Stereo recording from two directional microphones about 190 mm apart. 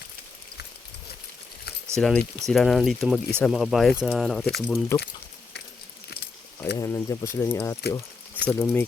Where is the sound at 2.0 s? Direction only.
5° left (ahead or behind).